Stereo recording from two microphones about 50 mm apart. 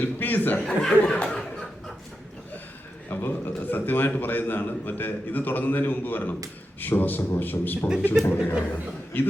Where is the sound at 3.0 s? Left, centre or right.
Left.